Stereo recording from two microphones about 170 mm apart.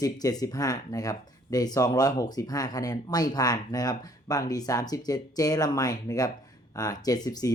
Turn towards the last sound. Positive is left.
turn(degrees=25)  # may be behind; listen again after turning